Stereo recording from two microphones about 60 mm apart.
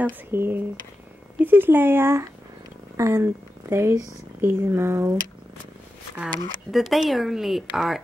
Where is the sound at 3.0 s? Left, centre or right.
Right.